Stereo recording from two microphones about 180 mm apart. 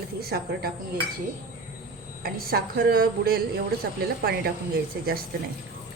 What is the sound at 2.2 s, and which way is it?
A woman's voice, 55° right (ahead or behind).